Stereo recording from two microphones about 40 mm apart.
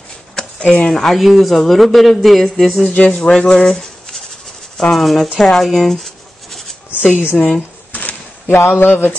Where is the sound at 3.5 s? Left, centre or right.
Centre.